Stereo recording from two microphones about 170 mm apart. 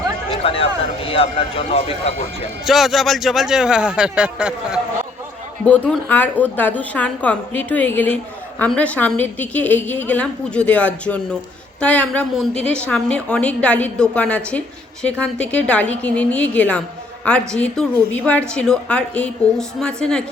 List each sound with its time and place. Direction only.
0.3 s speech: 35° left (ahead or behind)
2.6 s a woman's voice: centre (ahead or behind)
5.6 s a woman's voice: 10° left (ahead or behind)